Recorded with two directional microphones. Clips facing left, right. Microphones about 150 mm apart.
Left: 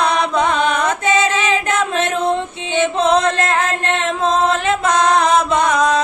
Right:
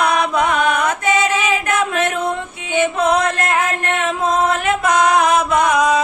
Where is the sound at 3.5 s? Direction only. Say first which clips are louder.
Left 1 dB; 15° right (ahead or behind).